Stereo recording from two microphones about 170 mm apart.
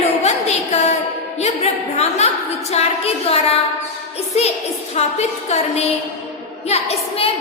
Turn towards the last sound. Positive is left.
turn(degrees=35)  # may be behind; listen again after turning